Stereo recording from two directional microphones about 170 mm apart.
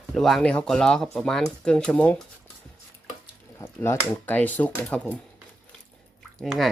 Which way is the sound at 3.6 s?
10° left (ahead or behind).